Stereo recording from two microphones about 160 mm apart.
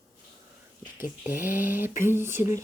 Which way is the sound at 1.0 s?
10° right (ahead or behind).